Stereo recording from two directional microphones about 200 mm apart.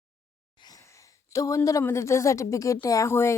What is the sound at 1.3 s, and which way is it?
A woman's voice, 15° left (ahead or behind).